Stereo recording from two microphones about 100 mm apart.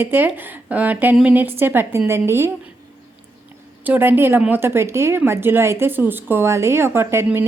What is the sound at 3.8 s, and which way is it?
A woman's voice, 20° right (ahead or behind).